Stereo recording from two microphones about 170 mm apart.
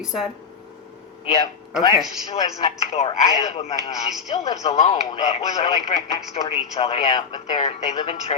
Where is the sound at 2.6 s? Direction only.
40° left (ahead or behind).